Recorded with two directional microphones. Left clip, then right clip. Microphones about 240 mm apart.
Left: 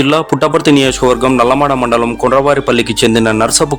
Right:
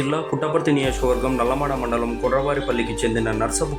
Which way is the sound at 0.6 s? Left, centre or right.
Left.